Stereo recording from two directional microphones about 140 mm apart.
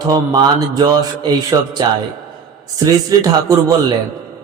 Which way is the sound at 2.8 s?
25° right (ahead or behind).